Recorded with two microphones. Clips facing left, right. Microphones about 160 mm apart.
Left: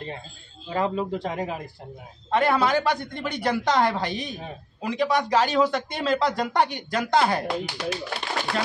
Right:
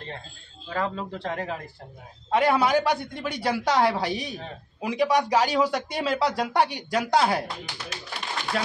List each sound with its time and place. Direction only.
0.7 s speech: 20° left (ahead or behind)
2.3 s speech: 10° right (ahead or behind)
7.8 s speech: 90° left
8.5 s speech: 5° right (ahead or behind)